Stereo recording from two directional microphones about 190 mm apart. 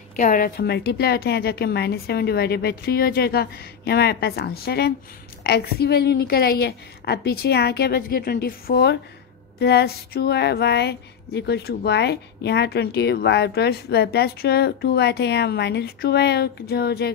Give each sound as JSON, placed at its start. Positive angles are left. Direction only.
{"t": 0.1, "sound": "speech", "side_deg": 45}